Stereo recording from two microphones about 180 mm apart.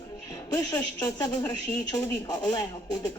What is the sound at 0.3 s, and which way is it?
Speech, 15° left (ahead or behind).